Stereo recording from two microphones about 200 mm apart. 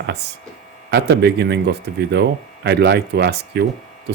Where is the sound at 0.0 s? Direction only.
55° right (ahead or behind).